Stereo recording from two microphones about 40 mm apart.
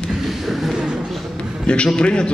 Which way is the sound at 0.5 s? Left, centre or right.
Centre.